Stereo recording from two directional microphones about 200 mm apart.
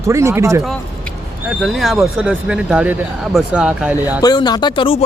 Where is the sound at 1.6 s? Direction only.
Centre (ahead or behind).